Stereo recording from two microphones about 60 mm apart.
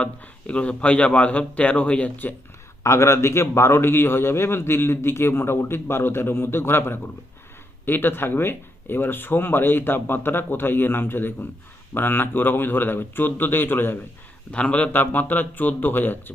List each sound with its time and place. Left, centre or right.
0.0 s a man's voice: left
2.8 s a man's voice: left
14.5 s a man's voice: left
14.9 s speech: left